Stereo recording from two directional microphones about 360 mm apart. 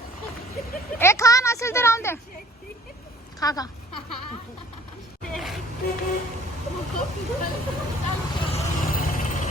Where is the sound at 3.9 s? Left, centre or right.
Left.